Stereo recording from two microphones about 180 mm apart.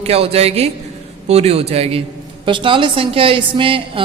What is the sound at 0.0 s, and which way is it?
A woman's voice, 35° right (ahead or behind).